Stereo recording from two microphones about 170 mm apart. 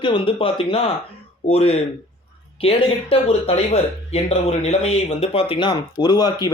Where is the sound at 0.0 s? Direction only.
30° left (ahead or behind).